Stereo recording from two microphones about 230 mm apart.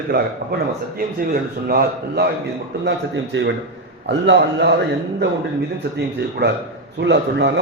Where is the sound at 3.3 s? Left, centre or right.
Right.